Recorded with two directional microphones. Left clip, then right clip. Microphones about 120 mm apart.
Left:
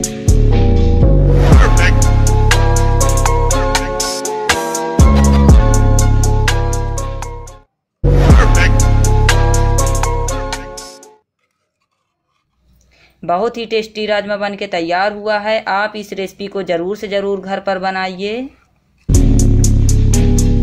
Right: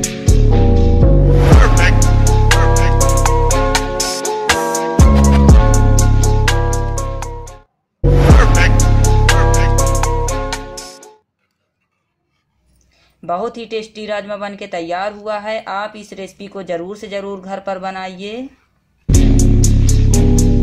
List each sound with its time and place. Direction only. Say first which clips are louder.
0.0 s music: even; centre (ahead or behind)
13.2 s speech: left 5 dB; 25° left (ahead or behind)
19.0 s music: right 1 dB; centre (ahead or behind)